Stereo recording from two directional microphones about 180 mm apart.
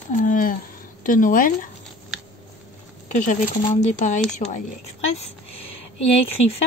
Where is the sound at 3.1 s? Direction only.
40° left (ahead or behind).